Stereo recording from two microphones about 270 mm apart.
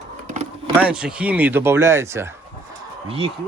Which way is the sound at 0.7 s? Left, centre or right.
Centre.